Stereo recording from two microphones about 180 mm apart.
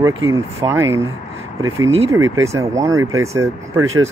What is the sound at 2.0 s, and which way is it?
Speech, 15° right (ahead or behind).